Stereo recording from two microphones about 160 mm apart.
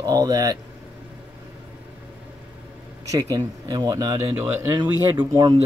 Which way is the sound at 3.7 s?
25° right (ahead or behind).